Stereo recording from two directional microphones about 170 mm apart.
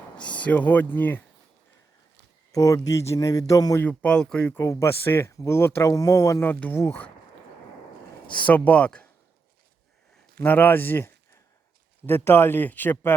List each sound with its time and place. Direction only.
0.2 s speech: 10° left (ahead or behind)
2.5 s a man's voice: 20° left (ahead or behind)
3.8 s speech: 5° left (ahead or behind)
8.3 s speech: 10° left (ahead or behind)
10.4 s speech: 10° left (ahead or behind)